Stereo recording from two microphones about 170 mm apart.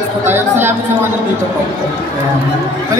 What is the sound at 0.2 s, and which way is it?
Speech, 15° right (ahead or behind).